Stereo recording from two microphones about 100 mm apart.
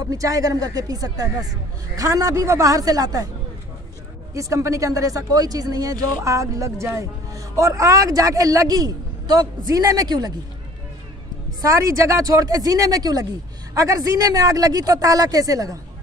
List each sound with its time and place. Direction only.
0.0 s speech: 35° right (ahead or behind)
4.3 s speech: 35° right (ahead or behind)
11.6 s speech: 30° right (ahead or behind)